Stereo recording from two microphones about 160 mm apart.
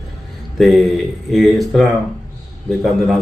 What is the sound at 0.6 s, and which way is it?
A man's voice, centre (ahead or behind).